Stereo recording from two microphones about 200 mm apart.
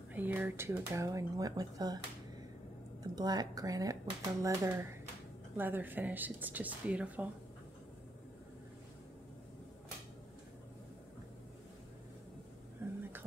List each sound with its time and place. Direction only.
0.1 s speech: 10° right (ahead or behind)
3.0 s speech: 20° right (ahead or behind)